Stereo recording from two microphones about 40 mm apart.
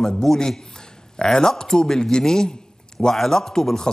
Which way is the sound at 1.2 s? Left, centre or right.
Centre.